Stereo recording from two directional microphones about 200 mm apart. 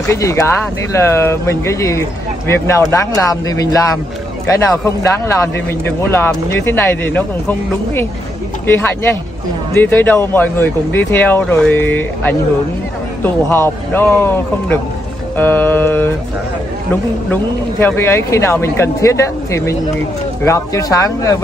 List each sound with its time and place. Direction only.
0.1 s speech: 15° left (ahead or behind)